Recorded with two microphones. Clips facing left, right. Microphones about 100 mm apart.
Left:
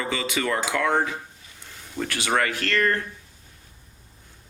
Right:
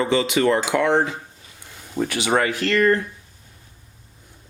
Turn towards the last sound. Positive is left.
turn(degrees=-15)  # may be behind; listen again after turning